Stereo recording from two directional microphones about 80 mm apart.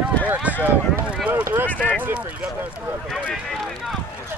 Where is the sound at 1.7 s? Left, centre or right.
Centre.